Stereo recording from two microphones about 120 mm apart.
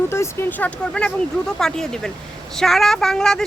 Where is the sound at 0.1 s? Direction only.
20° left (ahead or behind).